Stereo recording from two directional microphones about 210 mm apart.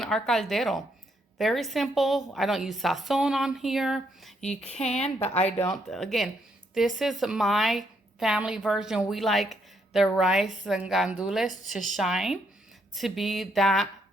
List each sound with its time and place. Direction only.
0.0 s a woman's voice: centre (ahead or behind)
4.6 s speech: 30° left (ahead or behind)
5.5 s a woman's voice: 5° left (ahead or behind)
11.4 s speech: 35° left (ahead or behind)
11.9 s a woman's voice: centre (ahead or behind)